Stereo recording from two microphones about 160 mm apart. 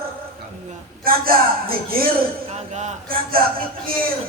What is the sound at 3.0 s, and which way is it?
Speech, 65° right (ahead or behind).